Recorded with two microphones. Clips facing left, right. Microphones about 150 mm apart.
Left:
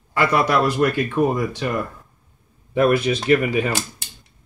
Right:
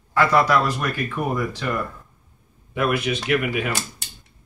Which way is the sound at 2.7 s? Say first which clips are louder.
Left 5 dB; 35° left (ahead or behind).